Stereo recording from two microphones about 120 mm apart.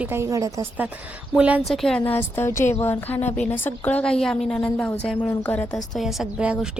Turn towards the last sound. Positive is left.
turn(degrees=-10)  # may be behind; listen again after turning